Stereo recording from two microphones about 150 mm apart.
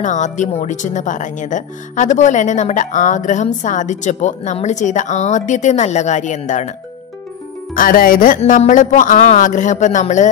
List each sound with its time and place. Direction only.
0.0 s speech: 55° left (ahead or behind)
7.7 s a man's voice: 70° left (ahead or behind)